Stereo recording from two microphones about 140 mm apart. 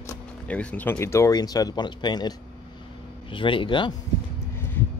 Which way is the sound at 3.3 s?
35° left (ahead or behind).